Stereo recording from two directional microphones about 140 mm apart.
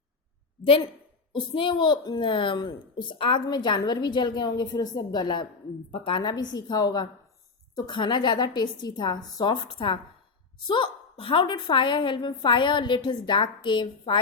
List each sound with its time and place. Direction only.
1.3 s a woman's voice: 35° left (ahead or behind)